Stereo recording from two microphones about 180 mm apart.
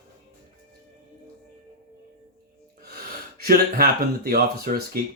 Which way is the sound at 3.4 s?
55° right (ahead or behind).